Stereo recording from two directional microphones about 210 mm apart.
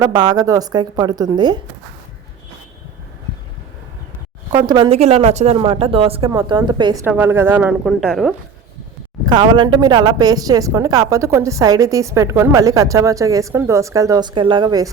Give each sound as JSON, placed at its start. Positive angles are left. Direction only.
{"t": 0.0, "sound": "speech", "side_deg": -20}
{"t": 4.5, "sound": "speech", "side_deg": -20}
{"t": 7.0, "sound": "a woman's voice", "side_deg": -10}
{"t": 9.2, "sound": "a woman's voice", "side_deg": -20}